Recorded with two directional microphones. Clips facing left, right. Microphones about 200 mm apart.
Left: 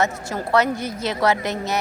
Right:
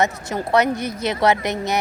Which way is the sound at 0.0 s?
20° right (ahead or behind).